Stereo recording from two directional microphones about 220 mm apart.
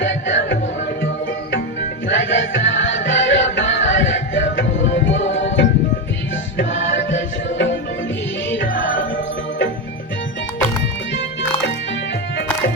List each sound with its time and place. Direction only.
0.0 s music: 55° left (ahead or behind)
2.0 s music: 55° left (ahead or behind)